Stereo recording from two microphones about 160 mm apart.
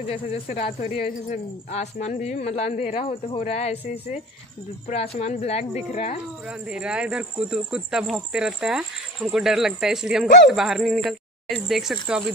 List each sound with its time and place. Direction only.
0.1 s speech: 45° left (ahead or behind)
5.1 s speech: 45° left (ahead or behind)
6.4 s speech: 5° right (ahead or behind)